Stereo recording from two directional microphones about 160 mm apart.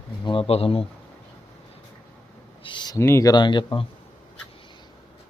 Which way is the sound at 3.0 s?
15° left (ahead or behind).